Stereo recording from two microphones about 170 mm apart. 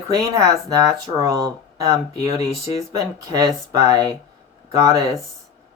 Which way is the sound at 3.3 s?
20° right (ahead or behind).